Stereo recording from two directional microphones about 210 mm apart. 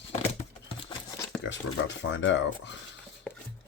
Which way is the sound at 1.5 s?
60° left (ahead or behind).